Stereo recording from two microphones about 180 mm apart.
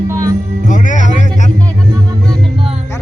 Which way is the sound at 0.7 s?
45° left (ahead or behind).